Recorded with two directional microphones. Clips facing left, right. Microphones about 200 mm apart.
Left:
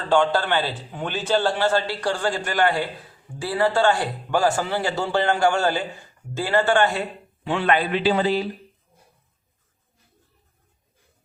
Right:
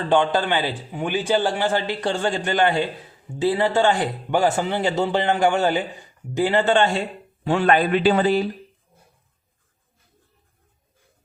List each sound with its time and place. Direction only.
0.1 s a man's voice: 20° right (ahead or behind)
7.4 s a man's voice: 40° right (ahead or behind)